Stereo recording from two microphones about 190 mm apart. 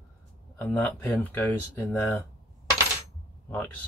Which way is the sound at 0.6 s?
10° left (ahead or behind).